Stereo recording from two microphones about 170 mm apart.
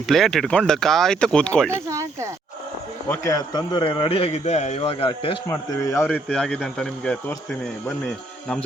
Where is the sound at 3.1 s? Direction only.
20° left (ahead or behind).